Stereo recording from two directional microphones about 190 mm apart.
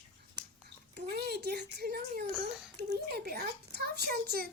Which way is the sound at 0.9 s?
55° right (ahead or behind).